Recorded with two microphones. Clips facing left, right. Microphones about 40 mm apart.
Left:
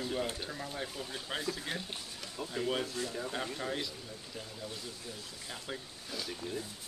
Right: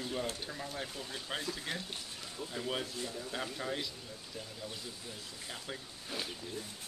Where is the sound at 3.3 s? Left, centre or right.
Centre.